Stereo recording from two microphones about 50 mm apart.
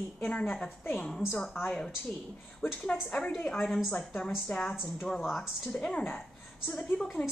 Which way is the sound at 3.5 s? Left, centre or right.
Centre.